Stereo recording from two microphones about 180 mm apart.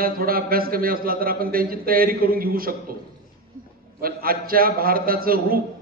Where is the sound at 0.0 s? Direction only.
55° right (ahead or behind).